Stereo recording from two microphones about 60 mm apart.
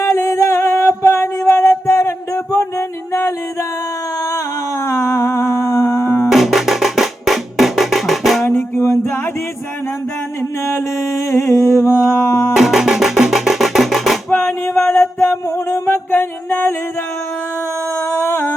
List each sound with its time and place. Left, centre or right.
0.0 s music: left
4.8 s humming: left
6.2 s music: centre
8.4 s music: left
9.0 s mantra: left
10.8 s humming: left
12.5 s music: centre
14.3 s music: left
14.6 s music: left
15.9 s music: left
17.9 s a sound: left